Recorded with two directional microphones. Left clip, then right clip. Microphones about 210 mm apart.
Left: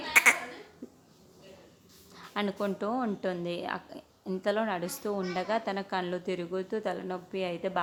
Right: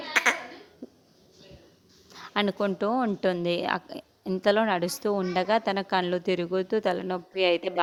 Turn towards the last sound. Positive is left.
turn(degrees=-40)  # may be behind; listen again after turning